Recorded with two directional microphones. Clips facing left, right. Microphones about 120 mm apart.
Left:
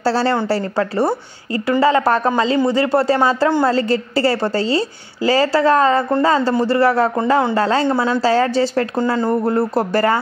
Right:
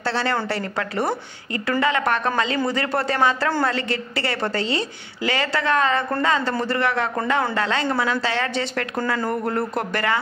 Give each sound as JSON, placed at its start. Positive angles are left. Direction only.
{"t": 0.0, "sound": "a woman's voice", "side_deg": 35}